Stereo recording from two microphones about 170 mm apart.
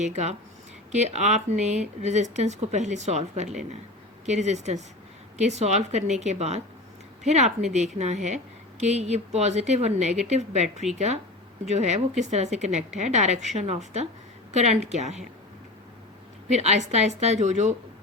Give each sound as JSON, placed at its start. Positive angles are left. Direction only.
{"t": 0.0, "sound": "speech", "side_deg": -40}
{"t": 16.5, "sound": "speech", "side_deg": -40}